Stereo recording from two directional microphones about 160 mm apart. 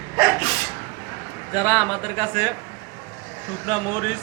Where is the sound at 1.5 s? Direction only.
15° left (ahead or behind).